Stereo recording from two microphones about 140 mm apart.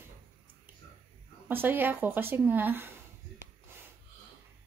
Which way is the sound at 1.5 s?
15° right (ahead or behind).